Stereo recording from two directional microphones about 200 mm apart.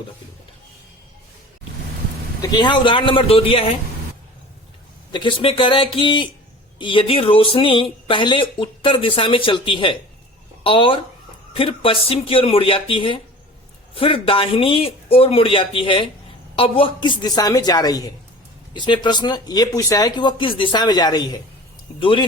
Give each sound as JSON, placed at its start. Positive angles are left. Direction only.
{"t": 2.4, "sound": "speech", "side_deg": 20}
{"t": 5.1, "sound": "speech", "side_deg": 25}